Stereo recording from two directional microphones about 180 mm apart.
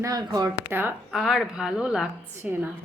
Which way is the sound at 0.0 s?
20° right (ahead or behind).